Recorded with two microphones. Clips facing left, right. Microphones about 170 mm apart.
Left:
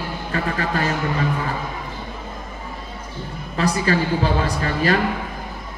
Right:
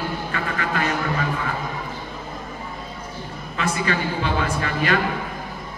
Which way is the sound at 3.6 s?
35° left (ahead or behind).